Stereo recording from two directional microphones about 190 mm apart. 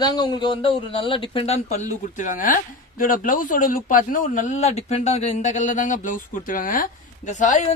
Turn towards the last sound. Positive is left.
turn(degrees=40)  # may be behind; listen again after turning